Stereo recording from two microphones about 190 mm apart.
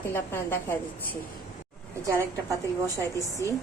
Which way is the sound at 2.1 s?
15° right (ahead or behind).